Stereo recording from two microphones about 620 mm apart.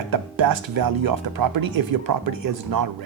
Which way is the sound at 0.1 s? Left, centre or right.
Right.